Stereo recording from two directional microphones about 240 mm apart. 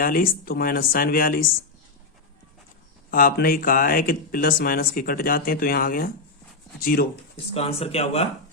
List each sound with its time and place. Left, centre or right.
0.0 s speech: left
3.1 s speech: left
7.5 s speech: left